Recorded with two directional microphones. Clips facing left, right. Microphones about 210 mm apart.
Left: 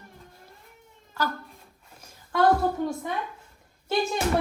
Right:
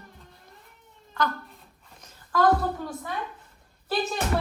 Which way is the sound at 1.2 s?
5° left (ahead or behind).